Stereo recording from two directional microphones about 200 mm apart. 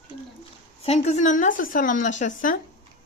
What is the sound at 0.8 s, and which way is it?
Speech, 35° left (ahead or behind).